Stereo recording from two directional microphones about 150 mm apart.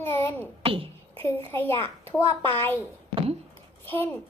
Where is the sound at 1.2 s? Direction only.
15° left (ahead or behind).